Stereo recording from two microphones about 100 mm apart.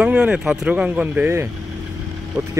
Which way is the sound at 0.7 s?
15° right (ahead or behind).